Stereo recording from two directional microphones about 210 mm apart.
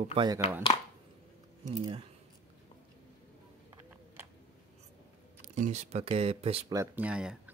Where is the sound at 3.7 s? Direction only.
10° right (ahead or behind).